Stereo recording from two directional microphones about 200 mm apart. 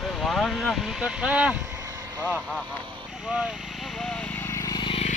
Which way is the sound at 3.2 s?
5° right (ahead or behind).